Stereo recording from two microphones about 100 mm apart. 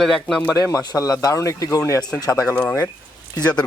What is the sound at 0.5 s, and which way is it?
Speech, 35° left (ahead or behind).